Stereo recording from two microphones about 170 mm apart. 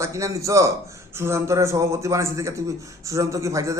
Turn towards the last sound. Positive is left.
turn(degrees=-20)  # may be behind; listen again after turning